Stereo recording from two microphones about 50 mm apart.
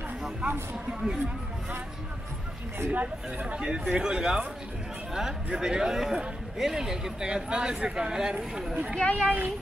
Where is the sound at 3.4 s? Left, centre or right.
Centre.